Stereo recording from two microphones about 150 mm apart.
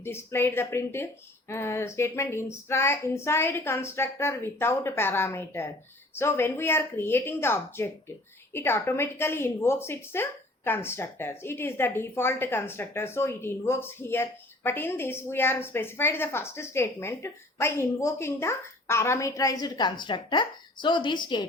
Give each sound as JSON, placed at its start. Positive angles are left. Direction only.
{"t": 0.0, "sound": "a woman's voice", "side_deg": 15}